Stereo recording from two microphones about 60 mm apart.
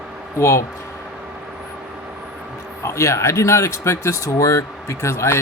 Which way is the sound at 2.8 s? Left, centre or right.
Left.